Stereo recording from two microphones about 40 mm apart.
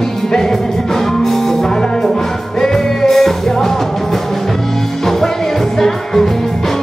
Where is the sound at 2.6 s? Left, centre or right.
Centre.